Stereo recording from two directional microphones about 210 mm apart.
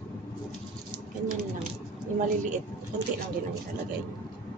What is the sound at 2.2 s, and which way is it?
Speech, 35° right (ahead or behind).